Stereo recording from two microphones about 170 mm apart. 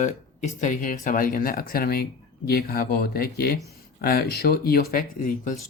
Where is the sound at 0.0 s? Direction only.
45° left (ahead or behind).